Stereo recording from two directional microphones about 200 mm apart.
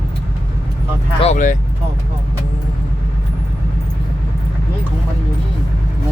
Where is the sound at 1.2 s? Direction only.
35° left (ahead or behind).